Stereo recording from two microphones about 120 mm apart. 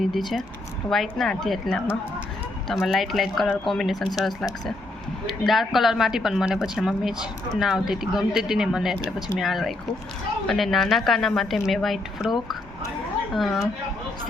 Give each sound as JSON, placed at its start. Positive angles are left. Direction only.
{"t": 0.0, "sound": "a woman's voice", "side_deg": 0}
{"t": 5.5, "sound": "a woman's voice", "side_deg": 0}